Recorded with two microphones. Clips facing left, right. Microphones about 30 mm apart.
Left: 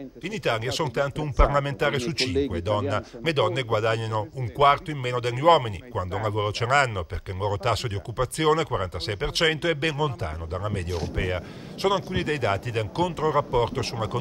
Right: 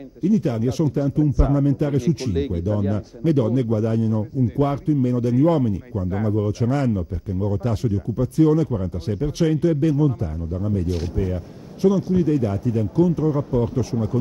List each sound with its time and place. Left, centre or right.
0.2 s speech: left